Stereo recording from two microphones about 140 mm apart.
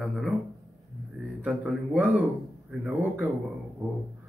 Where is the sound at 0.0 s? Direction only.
Centre (ahead or behind).